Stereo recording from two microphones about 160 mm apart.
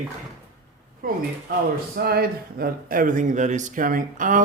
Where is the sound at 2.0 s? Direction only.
75° right (ahead or behind).